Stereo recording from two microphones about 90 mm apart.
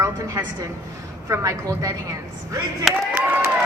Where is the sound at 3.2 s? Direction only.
20° right (ahead or behind).